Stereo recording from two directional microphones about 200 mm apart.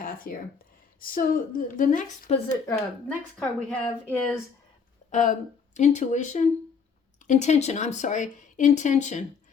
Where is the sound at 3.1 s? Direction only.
5° left (ahead or behind).